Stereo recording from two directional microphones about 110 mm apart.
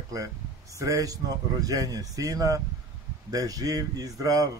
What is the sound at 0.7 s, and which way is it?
Speech, 30° right (ahead or behind).